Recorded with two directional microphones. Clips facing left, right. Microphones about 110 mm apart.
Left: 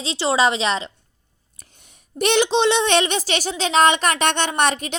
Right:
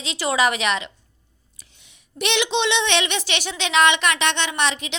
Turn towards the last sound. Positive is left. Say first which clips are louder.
# left 4 dB
turn(degrees=45)  # may be behind; listen again after turning